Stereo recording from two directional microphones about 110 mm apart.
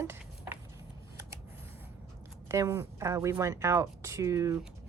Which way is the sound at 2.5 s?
25° right (ahead or behind).